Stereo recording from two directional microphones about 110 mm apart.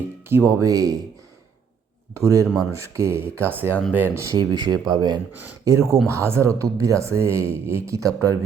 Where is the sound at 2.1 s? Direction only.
30° right (ahead or behind).